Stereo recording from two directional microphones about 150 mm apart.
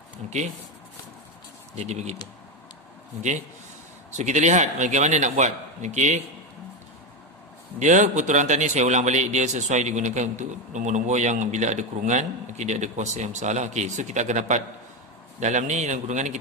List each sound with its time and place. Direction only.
0.2 s a man's voice: 50° right (ahead or behind)
1.8 s a man's voice: 50° right (ahead or behind)
4.1 s a man's voice: 50° right (ahead or behind)
7.8 s a man's voice: 55° right (ahead or behind)